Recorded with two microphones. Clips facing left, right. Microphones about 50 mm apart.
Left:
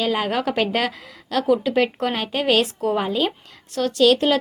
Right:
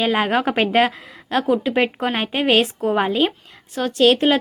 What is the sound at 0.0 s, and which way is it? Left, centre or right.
A woman's voice, right.